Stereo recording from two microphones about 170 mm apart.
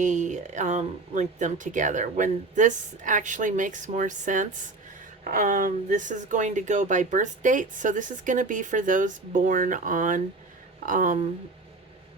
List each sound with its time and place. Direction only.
0.0 s speech: 45° right (ahead or behind)